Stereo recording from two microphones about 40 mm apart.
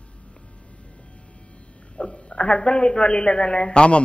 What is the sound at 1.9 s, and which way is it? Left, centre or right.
A man's voice, left.